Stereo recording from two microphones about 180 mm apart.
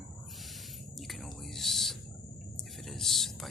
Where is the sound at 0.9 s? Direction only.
Centre (ahead or behind).